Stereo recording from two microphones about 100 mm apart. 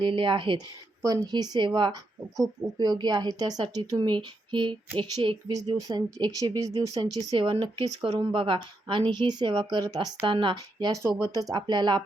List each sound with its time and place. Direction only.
0.0 s speech: 55° right (ahead or behind)
1.0 s speech: 40° right (ahead or behind)
3.9 s speech: 55° right (ahead or behind)
5.5 s speech: 40° right (ahead or behind)
7.3 s speech: 60° right (ahead or behind); by 10.1 s 45° right (ahead or behind)
10.2 s speech: 55° right (ahead or behind); by 11.6 s 40° right (ahead or behind)
11.6 s speech: 50° right (ahead or behind)